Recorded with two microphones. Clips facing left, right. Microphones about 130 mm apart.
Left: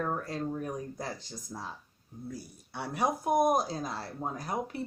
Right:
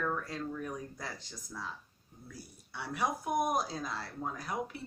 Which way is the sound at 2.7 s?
40° left (ahead or behind).